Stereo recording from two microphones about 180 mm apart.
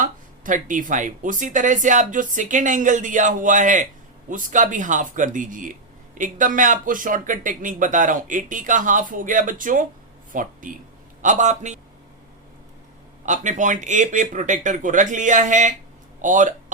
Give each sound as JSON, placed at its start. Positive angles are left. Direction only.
{"t": 0.0, "sound": "a man's voice", "side_deg": -45}
{"t": 13.2, "sound": "speech", "side_deg": -40}